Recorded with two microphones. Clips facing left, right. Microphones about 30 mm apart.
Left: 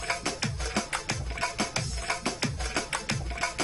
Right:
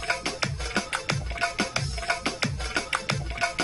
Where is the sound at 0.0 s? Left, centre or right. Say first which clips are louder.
Right 3 dB; right.